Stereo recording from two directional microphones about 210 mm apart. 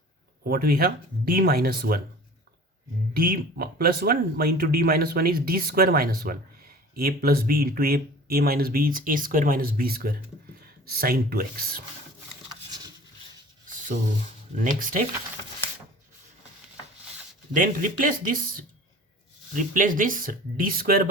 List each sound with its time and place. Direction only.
0.4 s speech: 45° right (ahead or behind)
3.2 s speech: 45° right (ahead or behind)
14.6 s speech: 40° right (ahead or behind)
17.5 s speech: 40° right (ahead or behind)